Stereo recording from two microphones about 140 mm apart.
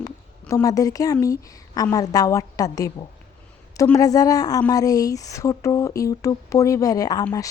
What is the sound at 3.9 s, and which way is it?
Speech, 25° left (ahead or behind).